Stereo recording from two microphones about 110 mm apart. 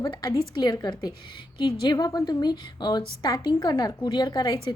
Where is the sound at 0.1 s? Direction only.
40° left (ahead or behind).